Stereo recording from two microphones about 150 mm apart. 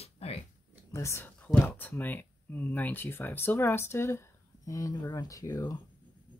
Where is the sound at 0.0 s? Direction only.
40° left (ahead or behind).